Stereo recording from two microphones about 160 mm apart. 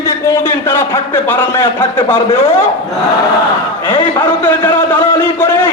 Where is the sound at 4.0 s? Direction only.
10° left (ahead or behind).